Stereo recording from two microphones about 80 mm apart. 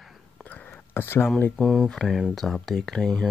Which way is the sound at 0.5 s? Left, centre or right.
Left.